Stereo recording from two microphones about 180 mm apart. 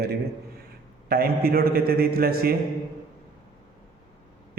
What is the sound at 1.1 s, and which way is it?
A man's voice, 55° right (ahead or behind).